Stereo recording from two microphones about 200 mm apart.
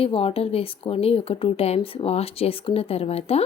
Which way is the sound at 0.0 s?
30° left (ahead or behind).